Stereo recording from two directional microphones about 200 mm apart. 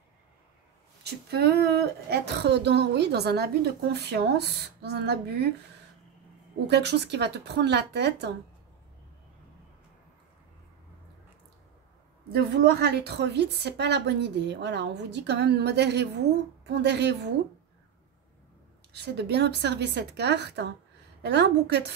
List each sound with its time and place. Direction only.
1.0 s a woman's voice: 55° right (ahead or behind)
6.7 s a woman's voice: 55° right (ahead or behind)
12.3 s a woman's voice: 55° right (ahead or behind)
18.9 s a woman's voice: 55° right (ahead or behind)